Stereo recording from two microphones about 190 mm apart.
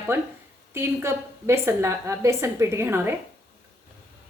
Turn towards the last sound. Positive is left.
turn(degrees=-10)  # may be behind; listen again after turning